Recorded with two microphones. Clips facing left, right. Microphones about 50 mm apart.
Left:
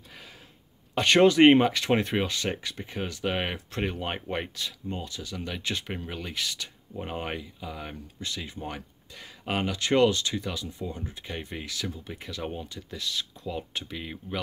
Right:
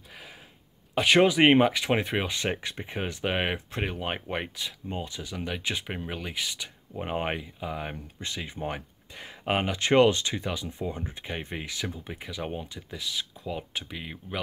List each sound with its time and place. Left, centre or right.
0.1 s a sound: centre
0.9 s speech: centre
2.3 s speech: right
3.8 s speech: centre